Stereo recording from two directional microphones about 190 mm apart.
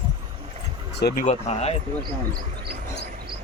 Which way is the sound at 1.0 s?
60° left (ahead or behind).